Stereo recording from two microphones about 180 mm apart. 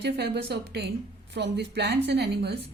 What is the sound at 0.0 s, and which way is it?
A woman's voice, 65° right (ahead or behind).